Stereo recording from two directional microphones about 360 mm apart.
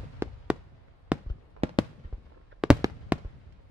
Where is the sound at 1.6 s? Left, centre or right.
Right.